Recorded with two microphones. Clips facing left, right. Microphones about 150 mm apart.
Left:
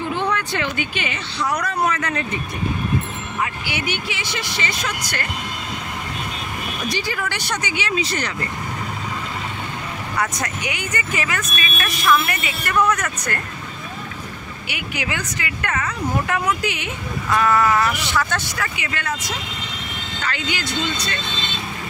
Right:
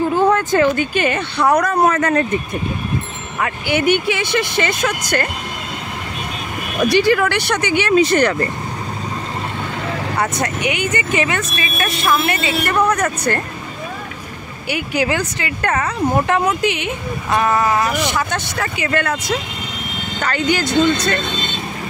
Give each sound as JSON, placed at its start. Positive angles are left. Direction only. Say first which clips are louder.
{"t": 0.1, "sound": "speech", "louder": "right 8 dB", "side_deg": -45}
{"t": 3.3, "sound": "speech", "louder": "right 8 dB", "side_deg": -55}
{"t": 6.9, "sound": "speech", "louder": "right 13 dB", "side_deg": -65}
{"t": 10.1, "sound": "speech", "louder": "right 3 dB", "side_deg": -30}
{"t": 14.7, "sound": "speech", "louder": "right 9 dB", "side_deg": -35}
{"t": 17.8, "sound": "speech", "louder": "right 3 dB", "side_deg": -50}
{"t": 20.2, "sound": "speech", "louder": "right 9 dB", "side_deg": -45}